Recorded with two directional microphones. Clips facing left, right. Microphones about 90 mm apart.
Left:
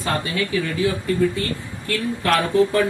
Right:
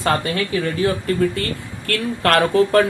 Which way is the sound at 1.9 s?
70° right (ahead or behind).